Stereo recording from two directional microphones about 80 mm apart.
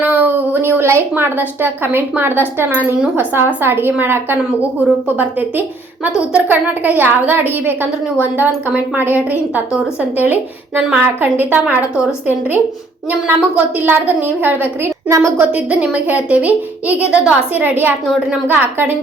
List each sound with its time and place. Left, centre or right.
0.0 s a woman's voice: right
10.8 s a woman's voice: centre
11.0 s a woman's voice: right
13.7 s a woman's voice: right